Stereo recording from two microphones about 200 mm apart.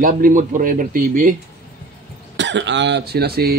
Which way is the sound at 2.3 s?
65° right (ahead or behind).